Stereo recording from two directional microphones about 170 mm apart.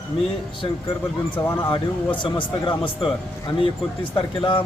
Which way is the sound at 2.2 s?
30° left (ahead or behind).